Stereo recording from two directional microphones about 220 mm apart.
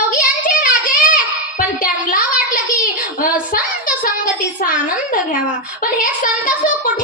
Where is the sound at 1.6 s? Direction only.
40° left (ahead or behind).